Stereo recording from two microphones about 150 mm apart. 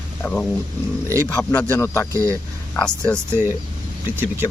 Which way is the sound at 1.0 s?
20° right (ahead or behind).